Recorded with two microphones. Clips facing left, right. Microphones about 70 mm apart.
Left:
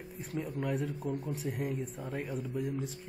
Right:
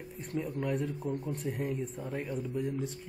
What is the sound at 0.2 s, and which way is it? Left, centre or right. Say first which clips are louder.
Speech: right 2 dB; centre.